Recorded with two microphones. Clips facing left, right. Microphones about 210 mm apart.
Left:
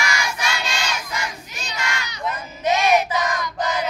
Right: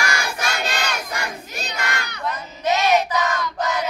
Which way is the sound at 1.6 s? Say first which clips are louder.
Right 1 dB; 60° right (ahead or behind).